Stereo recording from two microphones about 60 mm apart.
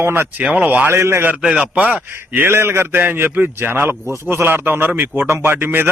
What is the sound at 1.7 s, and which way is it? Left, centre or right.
A man's voice, right.